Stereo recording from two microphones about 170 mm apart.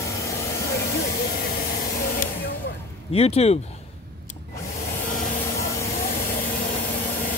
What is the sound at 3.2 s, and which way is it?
Speech, 35° left (ahead or behind).